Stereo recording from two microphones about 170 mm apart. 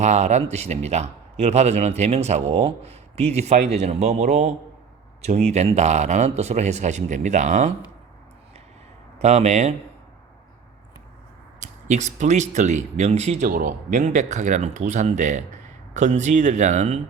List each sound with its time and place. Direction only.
0.0 s a man's voice: 45° right (ahead or behind)
9.1 s a man's voice: 40° right (ahead or behind)
11.6 s speech: 45° right (ahead or behind)
13.5 s speech: 55° right (ahead or behind); by 17.0 s 40° right (ahead or behind)